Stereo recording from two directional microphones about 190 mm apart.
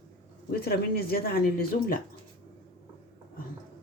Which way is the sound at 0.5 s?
55° left (ahead or behind).